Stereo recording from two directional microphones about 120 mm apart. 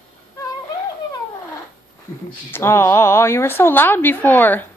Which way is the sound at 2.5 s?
20° left (ahead or behind).